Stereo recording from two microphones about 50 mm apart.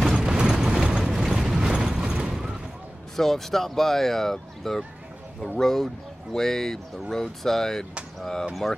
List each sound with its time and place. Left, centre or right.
0.1 s a sound: centre
0.7 s mechanisms: centre
3.2 s speech: centre